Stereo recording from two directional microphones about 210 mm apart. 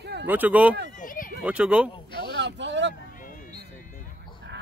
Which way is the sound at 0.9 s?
40° left (ahead or behind).